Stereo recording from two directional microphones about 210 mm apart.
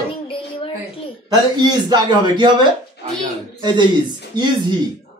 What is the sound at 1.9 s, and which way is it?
Speech, 20° right (ahead or behind).